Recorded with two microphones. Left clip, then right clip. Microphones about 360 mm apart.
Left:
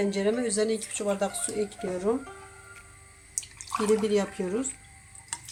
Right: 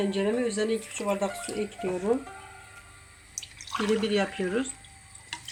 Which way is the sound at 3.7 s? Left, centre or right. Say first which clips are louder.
Left 2 dB; centre.